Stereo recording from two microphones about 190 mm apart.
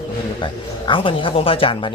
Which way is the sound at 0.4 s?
25° left (ahead or behind).